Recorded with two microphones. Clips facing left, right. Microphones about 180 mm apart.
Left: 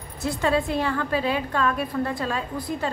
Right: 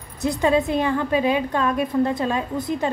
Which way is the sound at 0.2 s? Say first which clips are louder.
Right 4 dB; 20° right (ahead or behind).